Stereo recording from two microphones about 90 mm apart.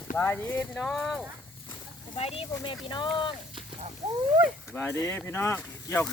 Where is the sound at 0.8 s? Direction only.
Centre (ahead or behind).